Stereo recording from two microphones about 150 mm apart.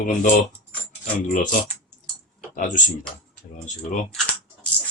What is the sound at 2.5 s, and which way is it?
Speech, 60° left (ahead or behind).